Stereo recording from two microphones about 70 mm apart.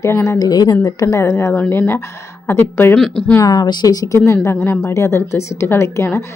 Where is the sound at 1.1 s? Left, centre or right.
Left.